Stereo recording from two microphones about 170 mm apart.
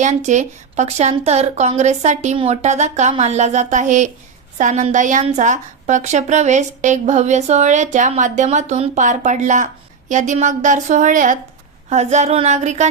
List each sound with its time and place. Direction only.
0.0 s a woman's voice: 45° right (ahead or behind)